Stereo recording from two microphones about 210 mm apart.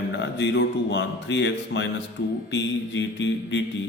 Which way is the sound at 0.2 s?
55° left (ahead or behind).